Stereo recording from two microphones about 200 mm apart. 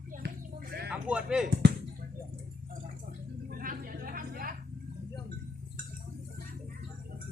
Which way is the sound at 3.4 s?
45° right (ahead or behind).